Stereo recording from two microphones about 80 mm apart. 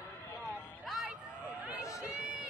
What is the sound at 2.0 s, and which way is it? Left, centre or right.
Run, centre.